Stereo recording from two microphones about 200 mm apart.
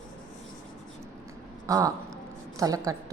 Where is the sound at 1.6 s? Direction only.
15° right (ahead or behind).